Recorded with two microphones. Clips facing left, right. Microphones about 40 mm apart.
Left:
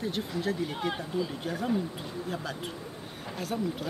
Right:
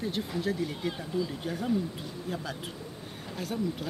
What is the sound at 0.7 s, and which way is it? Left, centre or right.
Speech, centre.